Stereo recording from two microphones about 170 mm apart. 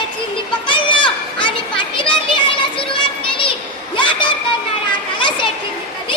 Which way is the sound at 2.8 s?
30° left (ahead or behind).